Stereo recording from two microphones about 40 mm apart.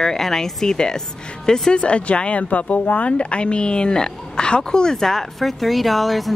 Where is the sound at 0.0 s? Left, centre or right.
Centre.